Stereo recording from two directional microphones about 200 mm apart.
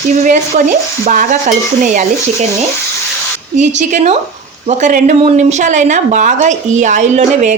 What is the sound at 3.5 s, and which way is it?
Speech, 35° right (ahead or behind).